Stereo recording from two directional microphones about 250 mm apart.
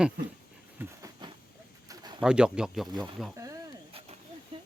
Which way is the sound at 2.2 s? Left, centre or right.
Centre.